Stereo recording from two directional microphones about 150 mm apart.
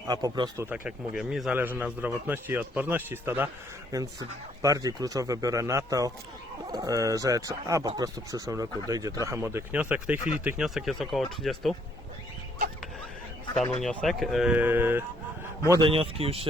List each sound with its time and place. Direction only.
0.1 s speech: 25° right (ahead or behind)
0.7 s a man's voice: 5° right (ahead or behind)
13.8 s speech: centre (ahead or behind); by 15.0 s 15° right (ahead or behind)
15.8 s speech: 40° right (ahead or behind)